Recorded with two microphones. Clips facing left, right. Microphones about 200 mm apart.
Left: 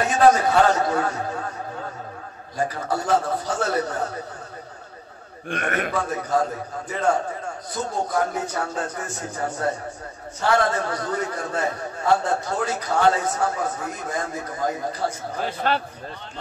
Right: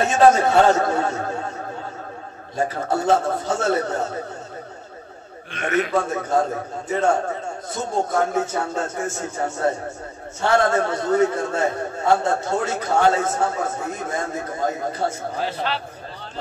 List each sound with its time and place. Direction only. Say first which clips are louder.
0.0 s a man's voice: right 2 dB; 25° right (ahead or behind)
2.5 s a man's voice: right 3 dB; 25° right (ahead or behind)
5.5 s a man's voice: right 3 dB; 50° left (ahead or behind)
5.9 s a man's voice: right 3 dB; 25° right (ahead or behind)
15.3 s a man's voice: left 1 dB; 50° left (ahead or behind)